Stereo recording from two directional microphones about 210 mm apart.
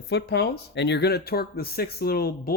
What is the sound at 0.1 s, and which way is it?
Speech, 55° left (ahead or behind).